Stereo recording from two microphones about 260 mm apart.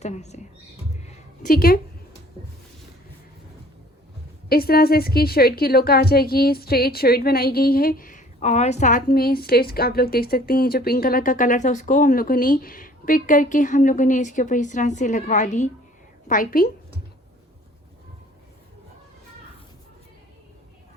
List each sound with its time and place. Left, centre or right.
0.0 s speech: left
1.0 s a sound: left
4.4 s a woman's voice: left